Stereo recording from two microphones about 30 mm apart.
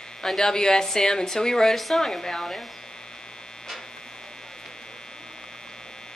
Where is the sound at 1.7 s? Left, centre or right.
Centre.